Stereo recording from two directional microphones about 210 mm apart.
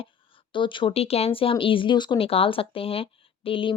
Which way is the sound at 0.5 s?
25° left (ahead or behind).